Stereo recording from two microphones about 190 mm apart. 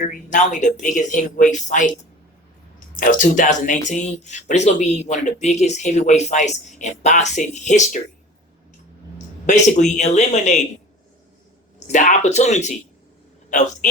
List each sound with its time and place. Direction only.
0.0 s speech: 40° left (ahead or behind)
9.5 s speech: 40° left (ahead or behind)
11.9 s speech: 40° left (ahead or behind)